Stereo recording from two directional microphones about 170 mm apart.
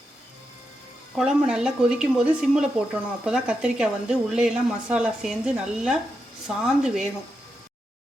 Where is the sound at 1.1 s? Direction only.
5° right (ahead or behind).